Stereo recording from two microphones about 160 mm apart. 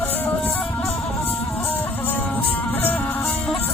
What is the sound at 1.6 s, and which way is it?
Music, 10° left (ahead or behind).